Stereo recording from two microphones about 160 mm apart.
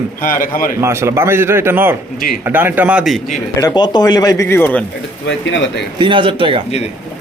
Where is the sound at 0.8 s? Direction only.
15° right (ahead or behind).